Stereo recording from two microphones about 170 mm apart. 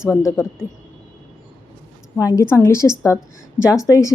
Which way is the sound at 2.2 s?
15° left (ahead or behind).